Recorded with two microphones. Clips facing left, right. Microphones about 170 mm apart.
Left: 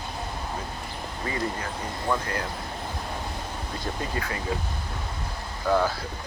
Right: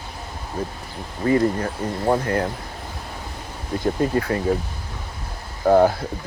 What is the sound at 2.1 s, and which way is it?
Speech, 60° right (ahead or behind).